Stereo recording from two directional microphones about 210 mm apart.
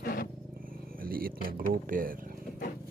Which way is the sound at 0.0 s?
45° left (ahead or behind).